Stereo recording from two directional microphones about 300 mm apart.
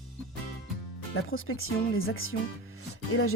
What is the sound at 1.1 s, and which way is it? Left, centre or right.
Speech, left.